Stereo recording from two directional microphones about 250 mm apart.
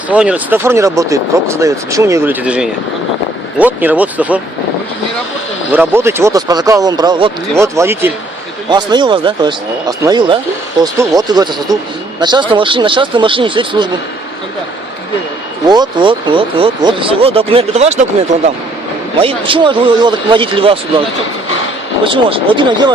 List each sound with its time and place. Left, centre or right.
0.1 s speech: centre
5.7 s speech: centre
15.6 s speech: centre
19.2 s speech: centre
22.0 s speech: right